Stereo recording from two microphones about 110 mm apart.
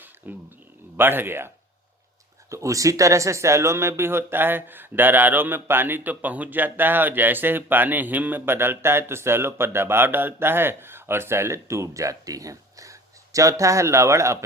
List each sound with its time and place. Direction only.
0.2 s speech: 15° right (ahead or behind)